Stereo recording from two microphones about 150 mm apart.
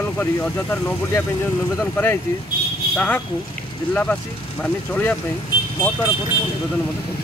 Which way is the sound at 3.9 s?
10° left (ahead or behind).